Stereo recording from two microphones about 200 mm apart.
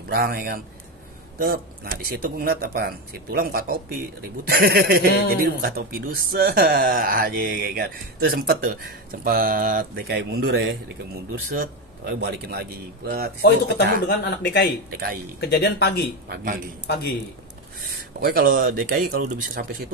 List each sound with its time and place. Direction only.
0.1 s speech: 50° right (ahead or behind)
11.5 s speech: 50° right (ahead or behind)
13.4 s speech: 55° left (ahead or behind)
16.3 s speech: 45° right (ahead or behind)
18.2 s speech: 45° right (ahead or behind)